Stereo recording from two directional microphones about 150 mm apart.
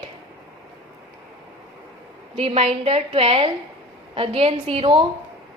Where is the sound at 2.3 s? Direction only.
40° right (ahead or behind).